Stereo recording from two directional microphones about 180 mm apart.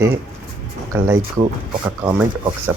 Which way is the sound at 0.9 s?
15° right (ahead or behind).